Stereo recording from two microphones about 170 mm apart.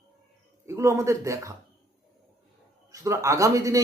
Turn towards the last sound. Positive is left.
turn(degrees=-20)  # may be behind; listen again after turning